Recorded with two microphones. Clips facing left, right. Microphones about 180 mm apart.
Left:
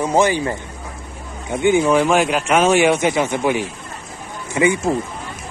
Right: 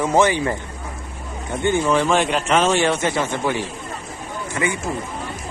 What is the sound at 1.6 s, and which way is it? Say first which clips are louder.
Speech: left 4 dB; 15° left (ahead or behind).